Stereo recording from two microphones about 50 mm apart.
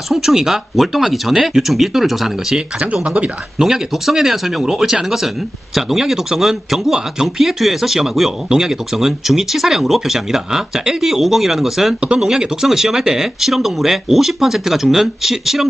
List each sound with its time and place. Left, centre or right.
0.1 s speech: centre
2.8 s speech: right
3.6 s speech: centre
11.9 s speech: centre